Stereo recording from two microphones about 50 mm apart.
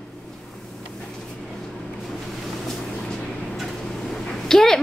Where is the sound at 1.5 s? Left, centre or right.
Centre.